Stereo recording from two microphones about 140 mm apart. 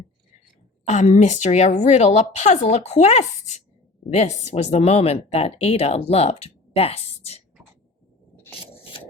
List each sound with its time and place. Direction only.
0.9 s a woman's voice: 55° left (ahead or behind)